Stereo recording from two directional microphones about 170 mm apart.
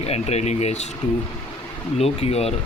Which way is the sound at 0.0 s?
40° left (ahead or behind).